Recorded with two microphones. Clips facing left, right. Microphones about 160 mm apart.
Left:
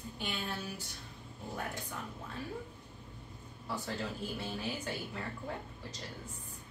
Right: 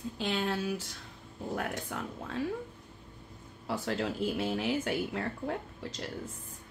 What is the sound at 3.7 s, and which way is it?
Speech, 85° right.